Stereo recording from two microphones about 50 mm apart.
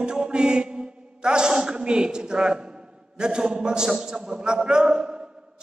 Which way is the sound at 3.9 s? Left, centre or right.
Centre.